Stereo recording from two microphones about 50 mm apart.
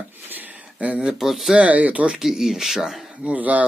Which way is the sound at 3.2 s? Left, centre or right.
Right.